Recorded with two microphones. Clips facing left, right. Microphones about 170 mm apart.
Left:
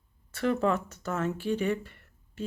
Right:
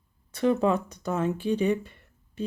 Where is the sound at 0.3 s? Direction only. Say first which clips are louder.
Right 3 dB; 15° right (ahead or behind).